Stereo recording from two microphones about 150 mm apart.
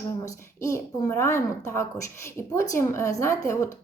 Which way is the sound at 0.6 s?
20° left (ahead or behind).